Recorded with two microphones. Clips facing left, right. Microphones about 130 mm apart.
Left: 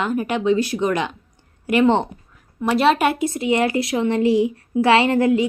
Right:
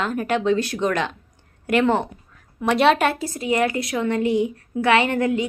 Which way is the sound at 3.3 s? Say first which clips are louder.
Left 2 dB; 25° left (ahead or behind).